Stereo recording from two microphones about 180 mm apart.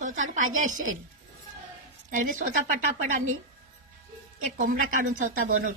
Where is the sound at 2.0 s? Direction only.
50° right (ahead or behind).